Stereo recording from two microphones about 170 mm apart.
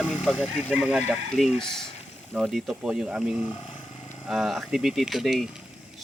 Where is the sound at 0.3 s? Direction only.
5° right (ahead or behind).